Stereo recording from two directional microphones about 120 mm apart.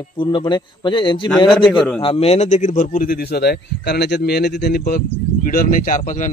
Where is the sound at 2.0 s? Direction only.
55° left (ahead or behind); by 3.0 s 90° left.